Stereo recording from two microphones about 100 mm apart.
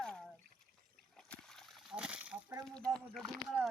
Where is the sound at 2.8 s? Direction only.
10° left (ahead or behind).